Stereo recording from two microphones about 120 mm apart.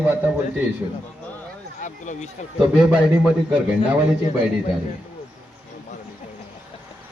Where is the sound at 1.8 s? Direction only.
90° left.